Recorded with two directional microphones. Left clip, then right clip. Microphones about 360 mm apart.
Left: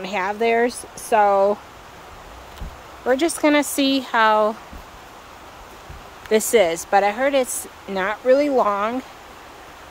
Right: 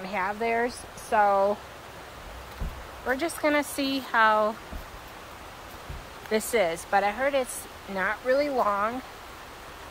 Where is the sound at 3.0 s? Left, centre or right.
Centre.